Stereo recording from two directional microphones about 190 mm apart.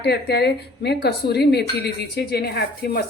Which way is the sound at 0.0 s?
60° left (ahead or behind).